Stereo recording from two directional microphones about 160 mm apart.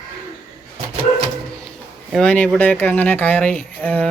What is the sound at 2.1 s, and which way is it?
Speech, 5° left (ahead or behind).